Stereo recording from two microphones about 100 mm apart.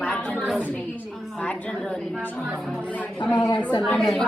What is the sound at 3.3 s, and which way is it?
Speech, 45° left (ahead or behind).